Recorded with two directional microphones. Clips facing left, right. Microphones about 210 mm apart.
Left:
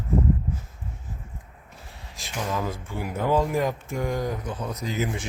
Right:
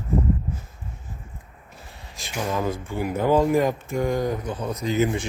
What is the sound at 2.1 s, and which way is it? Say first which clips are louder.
Speech: right 3 dB; centre (ahead or behind).